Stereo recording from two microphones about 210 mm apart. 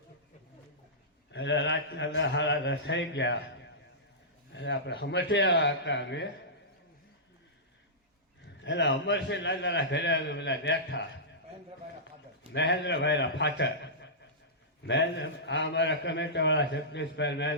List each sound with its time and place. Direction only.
1.3 s a man's voice: 60° left (ahead or behind)
4.5 s a man's voice: 55° left (ahead or behind)
8.6 s a man's voice: 60° left (ahead or behind)
12.5 s a man's voice: 55° left (ahead or behind)